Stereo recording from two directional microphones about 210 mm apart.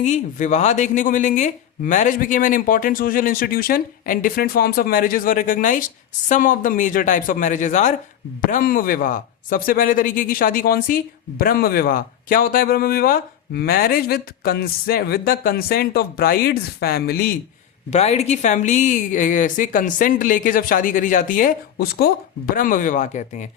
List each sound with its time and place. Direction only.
0.0 s speech: 35° left (ahead or behind)
17.9 s speech: 30° left (ahead or behind)